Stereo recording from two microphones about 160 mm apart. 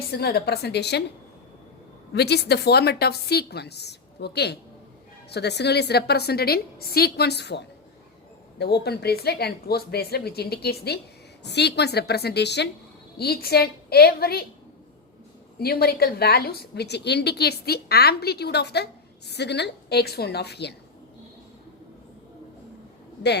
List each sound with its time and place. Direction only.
0.1 s a woman's voice: 85° left
2.1 s a woman's voice: 90° left
13.1 s a woman's voice: 75° left (ahead or behind)
15.5 s a woman's voice: 75° left (ahead or behind)